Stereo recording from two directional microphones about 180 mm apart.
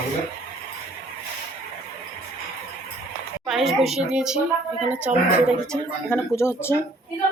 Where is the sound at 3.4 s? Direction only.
Centre (ahead or behind).